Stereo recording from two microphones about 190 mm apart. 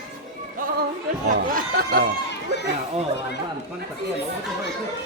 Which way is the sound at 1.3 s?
45° right (ahead or behind).